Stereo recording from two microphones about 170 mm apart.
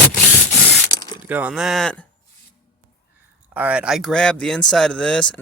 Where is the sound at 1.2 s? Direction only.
10° right (ahead or behind).